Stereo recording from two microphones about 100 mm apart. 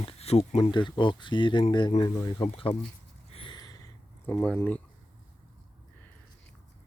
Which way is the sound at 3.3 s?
70° left (ahead or behind).